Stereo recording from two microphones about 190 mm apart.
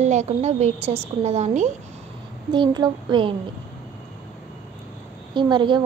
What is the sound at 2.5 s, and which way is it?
Speech, 25° right (ahead or behind).